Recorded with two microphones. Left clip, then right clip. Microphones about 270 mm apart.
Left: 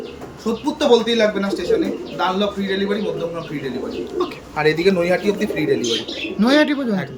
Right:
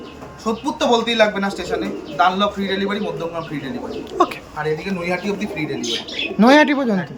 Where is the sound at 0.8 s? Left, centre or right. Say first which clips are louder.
Left 1 dB; centre.